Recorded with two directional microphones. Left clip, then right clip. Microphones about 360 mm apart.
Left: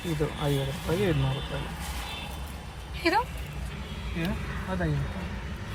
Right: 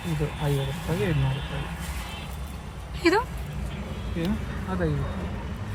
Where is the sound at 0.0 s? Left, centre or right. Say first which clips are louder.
Left 1 dB; centre.